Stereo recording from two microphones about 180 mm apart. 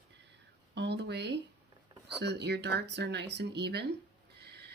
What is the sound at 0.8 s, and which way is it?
Speech, 70° right (ahead or behind).